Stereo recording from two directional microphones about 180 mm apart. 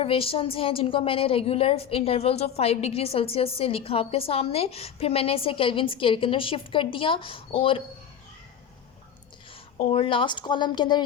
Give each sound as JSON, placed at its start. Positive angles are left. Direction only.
{"t": 0.0, "sound": "a woman's voice", "side_deg": 30}
{"t": 9.9, "sound": "speech", "side_deg": 30}